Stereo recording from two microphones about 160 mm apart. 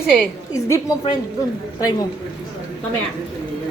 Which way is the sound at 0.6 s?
20° left (ahead or behind).